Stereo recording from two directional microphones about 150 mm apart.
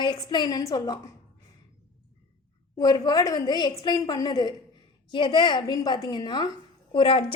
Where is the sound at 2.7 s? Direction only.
25° left (ahead or behind).